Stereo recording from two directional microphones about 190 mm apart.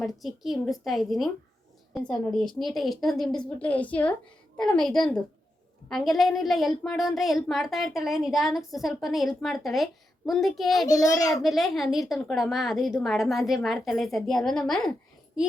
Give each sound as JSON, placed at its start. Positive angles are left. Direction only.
{"t": 0.0, "sound": "a woman's voice", "side_deg": 0}
{"t": 10.8, "sound": "a child's voice", "side_deg": 20}
{"t": 11.4, "sound": "a woman's voice", "side_deg": 0}